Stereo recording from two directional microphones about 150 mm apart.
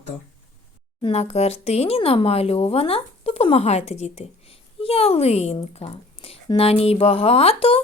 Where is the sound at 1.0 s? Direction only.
45° left (ahead or behind).